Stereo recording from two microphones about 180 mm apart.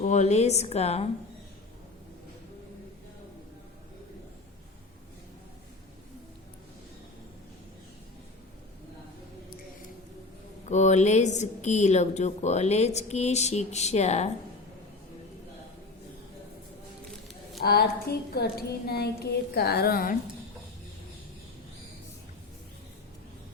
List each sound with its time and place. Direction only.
0.0 s speech: 40° left (ahead or behind)
10.7 s speech: 40° left (ahead or behind)
17.6 s a woman's voice: 60° left (ahead or behind)